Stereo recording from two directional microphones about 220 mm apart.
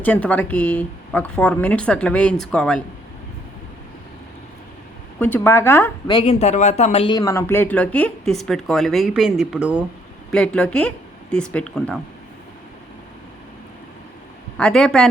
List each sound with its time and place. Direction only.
0.0 s a woman's voice: 5° left (ahead or behind)
5.2 s a woman's voice: 10° left (ahead or behind)
14.6 s speech: 5° left (ahead or behind)